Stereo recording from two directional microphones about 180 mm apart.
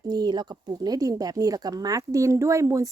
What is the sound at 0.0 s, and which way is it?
A woman's voice, 20° right (ahead or behind).